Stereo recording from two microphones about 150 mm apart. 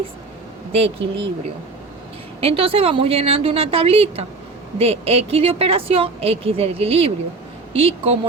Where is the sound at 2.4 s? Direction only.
40° right (ahead or behind).